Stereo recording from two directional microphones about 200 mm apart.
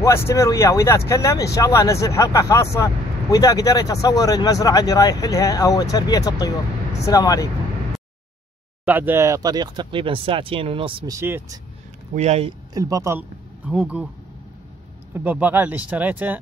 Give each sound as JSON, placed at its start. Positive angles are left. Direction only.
{"t": 0.0, "sound": "speech", "side_deg": 15}
{"t": 8.8, "sound": "speech", "side_deg": -10}
{"t": 11.1, "sound": "speech", "side_deg": -10}
{"t": 12.2, "sound": "speech", "side_deg": -30}
{"t": 12.7, "sound": "speech", "side_deg": -15}
{"t": 13.7, "sound": "speech", "side_deg": -5}
{"t": 15.1, "sound": "speech", "side_deg": -10}